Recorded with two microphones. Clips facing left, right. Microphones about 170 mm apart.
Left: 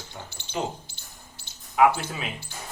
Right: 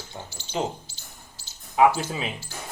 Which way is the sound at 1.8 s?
25° right (ahead or behind).